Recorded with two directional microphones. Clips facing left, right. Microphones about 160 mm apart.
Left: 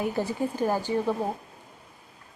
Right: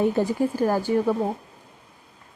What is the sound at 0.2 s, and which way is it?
Speech, 10° right (ahead or behind).